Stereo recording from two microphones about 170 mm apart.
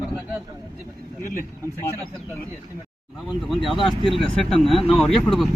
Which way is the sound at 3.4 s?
Centre (ahead or behind).